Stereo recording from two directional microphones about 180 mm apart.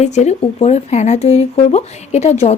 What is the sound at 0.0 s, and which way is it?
Speech, 40° left (ahead or behind).